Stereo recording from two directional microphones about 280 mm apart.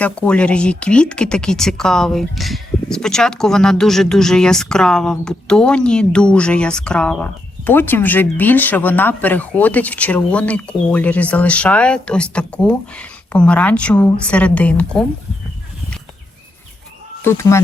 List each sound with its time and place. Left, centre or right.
0.0 s speech: centre
17.2 s speech: centre